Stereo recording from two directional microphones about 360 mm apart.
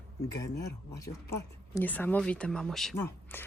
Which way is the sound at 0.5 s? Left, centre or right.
Left.